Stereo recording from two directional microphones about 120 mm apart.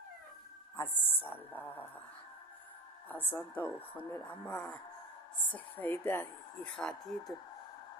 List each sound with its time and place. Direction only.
0.8 s a woman's voice: 15° left (ahead or behind)
3.1 s a woman's voice: 15° left (ahead or behind)
6.7 s speech: 5° left (ahead or behind)